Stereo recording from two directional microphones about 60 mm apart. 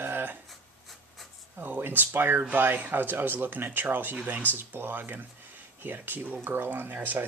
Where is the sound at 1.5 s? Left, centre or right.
Right.